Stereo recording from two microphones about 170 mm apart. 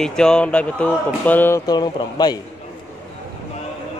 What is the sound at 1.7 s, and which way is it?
Speech, 25° left (ahead or behind).